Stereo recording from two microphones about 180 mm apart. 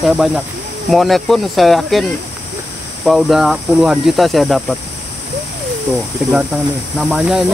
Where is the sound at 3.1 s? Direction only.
Centre (ahead or behind).